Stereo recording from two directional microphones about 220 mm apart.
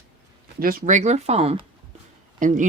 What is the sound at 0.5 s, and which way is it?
Speech, 40° right (ahead or behind).